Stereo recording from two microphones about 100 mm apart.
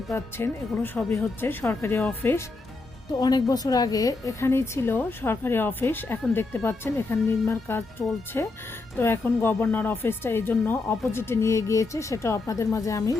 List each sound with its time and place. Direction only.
0.3 s speech: 20° left (ahead or behind)
3.1 s speech: 40° left (ahead or behind)